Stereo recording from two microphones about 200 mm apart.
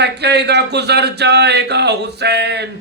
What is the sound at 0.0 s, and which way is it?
Male singing, 55° right (ahead or behind).